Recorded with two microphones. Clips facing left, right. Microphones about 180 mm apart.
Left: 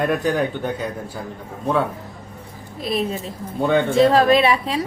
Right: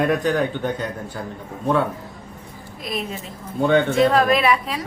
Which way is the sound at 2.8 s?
30° left (ahead or behind).